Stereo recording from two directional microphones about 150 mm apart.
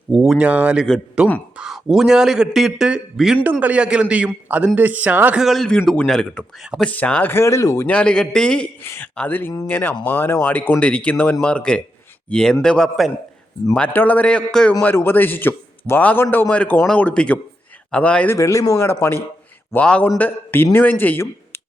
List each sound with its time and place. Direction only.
0.1 s a man's voice: 5° right (ahead or behind); by 7.9 s 20° left (ahead or behind)
7.9 s a man's voice: 5° left (ahead or behind)
18.3 s a man's voice: 20° left (ahead or behind)